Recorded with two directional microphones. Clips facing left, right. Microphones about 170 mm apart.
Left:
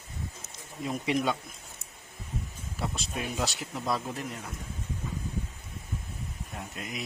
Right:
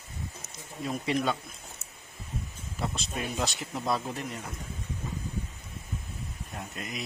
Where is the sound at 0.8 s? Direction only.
15° left (ahead or behind).